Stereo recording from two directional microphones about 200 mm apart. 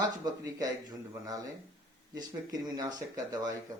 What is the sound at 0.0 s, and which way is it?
A man's voice, 20° right (ahead or behind).